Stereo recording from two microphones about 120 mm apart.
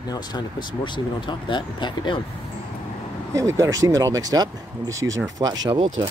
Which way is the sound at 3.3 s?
25° right (ahead or behind).